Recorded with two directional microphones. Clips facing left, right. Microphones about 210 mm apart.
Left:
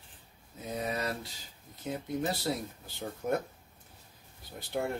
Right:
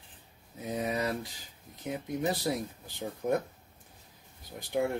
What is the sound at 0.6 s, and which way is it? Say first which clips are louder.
Speech: right 3 dB; 15° right (ahead or behind).